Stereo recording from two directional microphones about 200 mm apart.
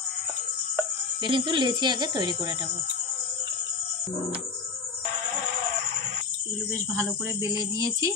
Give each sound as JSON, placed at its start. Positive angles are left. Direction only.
{"t": 1.2, "sound": "speech", "side_deg": -25}
{"t": 7.0, "sound": "speech", "side_deg": -15}